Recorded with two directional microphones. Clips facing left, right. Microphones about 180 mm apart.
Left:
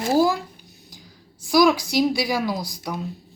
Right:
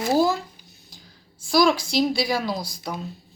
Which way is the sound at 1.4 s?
15° left (ahead or behind).